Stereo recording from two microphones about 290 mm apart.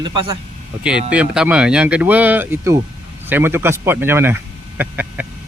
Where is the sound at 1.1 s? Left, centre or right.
Centre.